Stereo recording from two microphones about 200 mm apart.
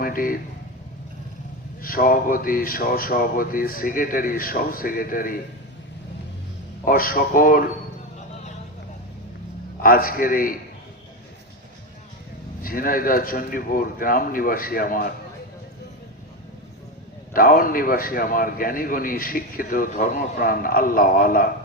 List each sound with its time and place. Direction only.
0.0 s speech: 45° left (ahead or behind)
1.8 s a man's voice: 45° left (ahead or behind)
6.8 s a man's voice: 45° left (ahead or behind)
9.8 s a man's voice: 45° left (ahead or behind)
12.6 s a man's voice: 45° left (ahead or behind)
17.3 s a man's voice: 45° left (ahead or behind)